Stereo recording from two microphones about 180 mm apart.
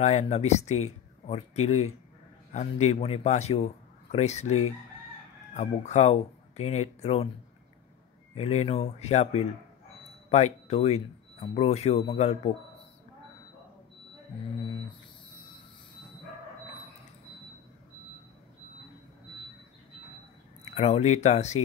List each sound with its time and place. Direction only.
0.0 s speech: 35° left (ahead or behind)
8.4 s speech: 35° left (ahead or behind)
20.7 s speech: 40° left (ahead or behind)